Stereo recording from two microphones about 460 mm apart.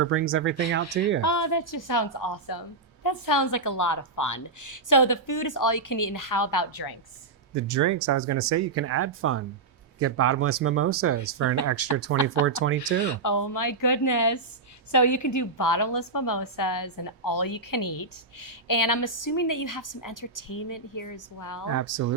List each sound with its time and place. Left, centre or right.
0.0 s speech: right
1.2 s a woman's voice: left
7.5 s speech: right
13.0 s a woman's voice: left
21.7 s speech: right